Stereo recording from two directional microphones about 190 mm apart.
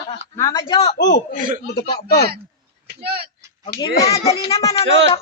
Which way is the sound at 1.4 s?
45° right (ahead or behind).